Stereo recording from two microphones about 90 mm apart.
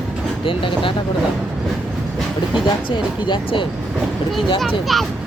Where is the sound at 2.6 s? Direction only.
60° left (ahead or behind).